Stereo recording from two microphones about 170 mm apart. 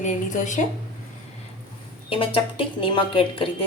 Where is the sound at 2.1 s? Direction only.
30° left (ahead or behind).